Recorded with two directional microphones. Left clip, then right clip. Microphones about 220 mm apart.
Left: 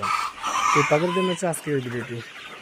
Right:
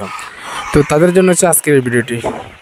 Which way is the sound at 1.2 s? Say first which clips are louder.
Right 14 dB; 45° right (ahead or behind).